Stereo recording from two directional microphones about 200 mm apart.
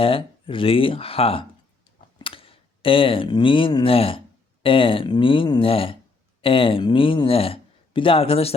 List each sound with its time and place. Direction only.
0.0 s speech: 25° left (ahead or behind)